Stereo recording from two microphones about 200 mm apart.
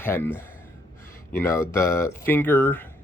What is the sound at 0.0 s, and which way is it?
Speech, 10° left (ahead or behind).